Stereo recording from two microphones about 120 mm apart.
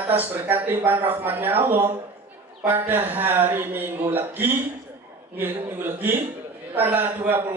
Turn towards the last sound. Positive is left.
turn(degrees=-15)  # may be behind; listen again after turning